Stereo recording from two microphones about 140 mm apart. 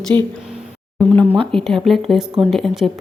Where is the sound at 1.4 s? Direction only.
5° left (ahead or behind).